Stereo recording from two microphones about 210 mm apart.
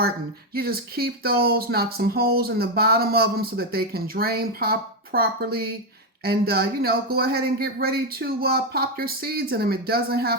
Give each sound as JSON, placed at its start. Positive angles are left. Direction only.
{"t": 0.5, "sound": "speech", "side_deg": -45}